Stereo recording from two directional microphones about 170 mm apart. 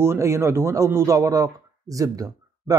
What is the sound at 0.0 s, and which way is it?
Speech, 15° right (ahead or behind).